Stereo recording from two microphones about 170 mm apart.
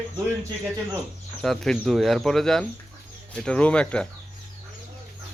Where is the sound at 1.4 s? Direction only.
5° left (ahead or behind).